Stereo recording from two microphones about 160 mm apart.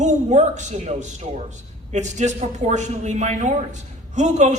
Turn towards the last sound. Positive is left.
turn(degrees=-45)  # may be behind; listen again after turning